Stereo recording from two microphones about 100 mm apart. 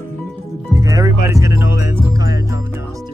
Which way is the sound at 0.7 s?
35° right (ahead or behind).